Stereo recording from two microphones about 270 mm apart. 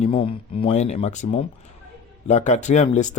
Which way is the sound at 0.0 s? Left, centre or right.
Centre.